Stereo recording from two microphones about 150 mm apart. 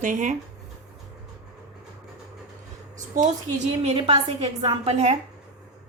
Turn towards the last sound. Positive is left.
turn(degrees=-45)  # may be behind; listen again after turning